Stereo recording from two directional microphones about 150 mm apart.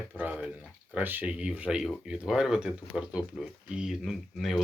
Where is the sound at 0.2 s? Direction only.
10° right (ahead or behind).